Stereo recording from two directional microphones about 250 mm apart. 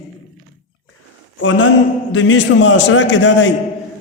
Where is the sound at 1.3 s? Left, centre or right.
Left.